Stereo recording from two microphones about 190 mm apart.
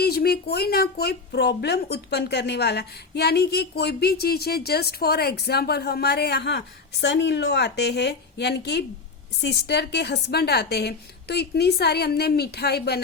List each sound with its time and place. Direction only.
0.0 s speech: 55° left (ahead or behind)